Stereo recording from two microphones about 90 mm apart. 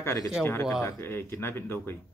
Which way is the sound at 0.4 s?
30° left (ahead or behind).